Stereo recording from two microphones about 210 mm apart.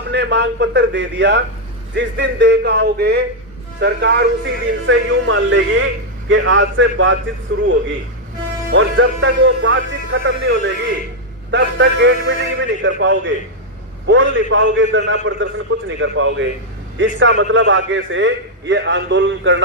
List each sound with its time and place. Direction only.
0.1 s a man's voice: 55° right (ahead or behind)
8.7 s a man's voice: 70° right (ahead or behind)